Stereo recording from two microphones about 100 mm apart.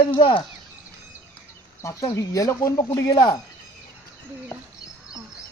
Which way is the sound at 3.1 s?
45° left (ahead or behind).